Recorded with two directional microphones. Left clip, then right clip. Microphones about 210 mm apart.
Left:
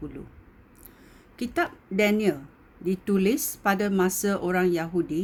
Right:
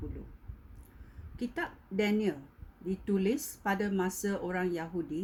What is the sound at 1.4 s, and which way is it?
Speech, 45° left (ahead or behind).